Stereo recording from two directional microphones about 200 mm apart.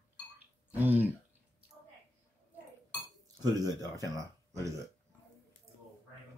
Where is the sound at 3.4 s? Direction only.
20° right (ahead or behind).